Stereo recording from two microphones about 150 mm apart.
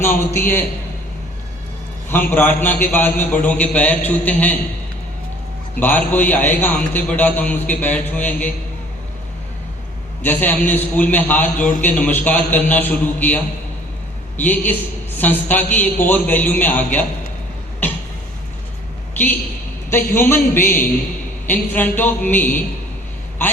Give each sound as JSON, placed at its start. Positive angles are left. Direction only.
{"t": 0.0, "sound": "a man's voice", "side_deg": 15}
{"t": 2.0, "sound": "a man's voice", "side_deg": 10}
{"t": 5.8, "sound": "a man's voice", "side_deg": 10}
{"t": 10.2, "sound": "a man's voice", "side_deg": 10}
{"t": 19.1, "sound": "a man's voice", "side_deg": 10}